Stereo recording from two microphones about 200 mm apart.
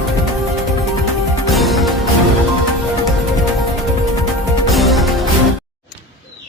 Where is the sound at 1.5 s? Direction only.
Centre (ahead or behind).